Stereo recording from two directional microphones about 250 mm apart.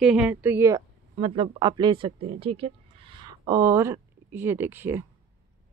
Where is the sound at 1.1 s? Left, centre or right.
Right.